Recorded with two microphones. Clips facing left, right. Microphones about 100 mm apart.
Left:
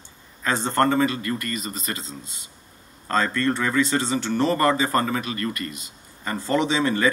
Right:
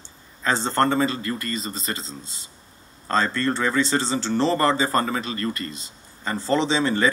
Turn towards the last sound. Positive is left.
turn(degrees=-30)  # may be behind; listen again after turning